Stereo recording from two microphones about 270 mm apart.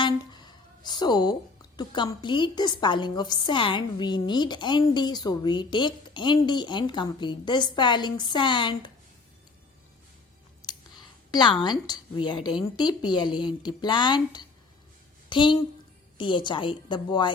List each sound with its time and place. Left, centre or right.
0.0 s a woman's voice: centre
10.6 s a sound: centre
11.3 s a woman's voice: centre